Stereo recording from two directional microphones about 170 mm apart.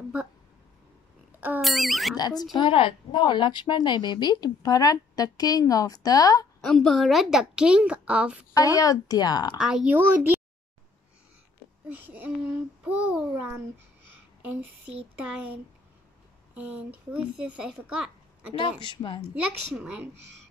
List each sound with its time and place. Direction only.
1.6 s a woman's voice: centre (ahead or behind)
2.1 s a woman's voice: 25° left (ahead or behind)
6.6 s a woman's voice: 5° left (ahead or behind)
8.5 s a woman's voice: 20° left (ahead or behind)
9.6 s a child's voice: 5° right (ahead or behind)
12.1 s a child's voice: 10° right (ahead or behind)
16.5 s a child's voice: 10° right (ahead or behind)
18.6 s a woman's voice: 30° left (ahead or behind)
19.3 s a child's voice: 5° right (ahead or behind)